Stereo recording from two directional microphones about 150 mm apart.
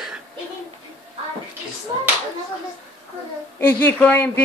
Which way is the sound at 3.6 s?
15° left (ahead or behind).